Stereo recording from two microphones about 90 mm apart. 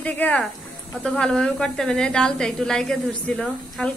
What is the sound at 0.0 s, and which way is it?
Speech, 15° left (ahead or behind).